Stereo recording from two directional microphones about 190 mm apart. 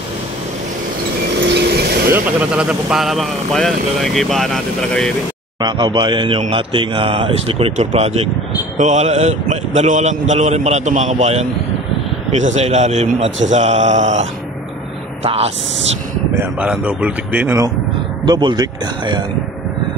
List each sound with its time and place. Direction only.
1.4 s vehicle: 60° right (ahead or behind)
2.1 s speech: 5° right (ahead or behind)
5.6 s a man's voice: 20° right (ahead or behind); by 14.2 s 40° right (ahead or behind)
15.2 s a man's voice: 30° right (ahead or behind)
16.3 s a man's voice: 5° right (ahead or behind)
18.2 s speech: 25° right (ahead or behind)